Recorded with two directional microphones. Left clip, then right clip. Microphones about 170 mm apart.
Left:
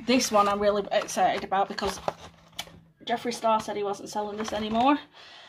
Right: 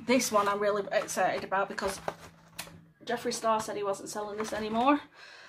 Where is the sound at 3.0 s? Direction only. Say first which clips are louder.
Left 3 dB; centre (ahead or behind).